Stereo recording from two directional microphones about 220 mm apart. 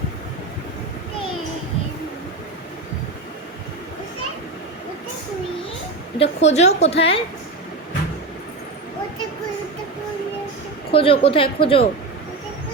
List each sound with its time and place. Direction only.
6.1 s a woman's voice: 30° left (ahead or behind)
10.9 s a woman's voice: 25° left (ahead or behind)